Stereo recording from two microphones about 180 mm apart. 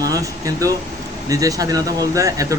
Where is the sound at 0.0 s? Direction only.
20° right (ahead or behind).